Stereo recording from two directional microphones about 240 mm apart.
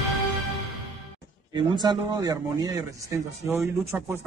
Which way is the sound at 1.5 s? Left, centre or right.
Centre.